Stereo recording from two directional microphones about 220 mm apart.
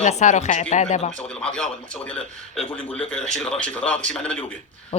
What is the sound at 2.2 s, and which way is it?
Speech, 25° left (ahead or behind).